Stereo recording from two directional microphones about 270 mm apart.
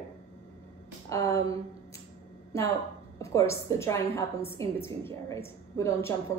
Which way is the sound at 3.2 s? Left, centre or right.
Centre.